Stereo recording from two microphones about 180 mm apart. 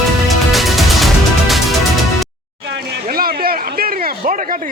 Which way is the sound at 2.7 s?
55° right (ahead or behind).